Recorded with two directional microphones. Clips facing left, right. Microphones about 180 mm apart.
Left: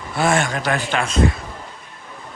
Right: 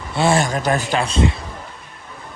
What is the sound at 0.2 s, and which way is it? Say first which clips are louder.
Speech: right 2 dB; 35° right (ahead or behind).